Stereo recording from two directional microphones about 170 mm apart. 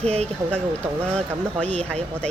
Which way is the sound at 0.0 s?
40° right (ahead or behind).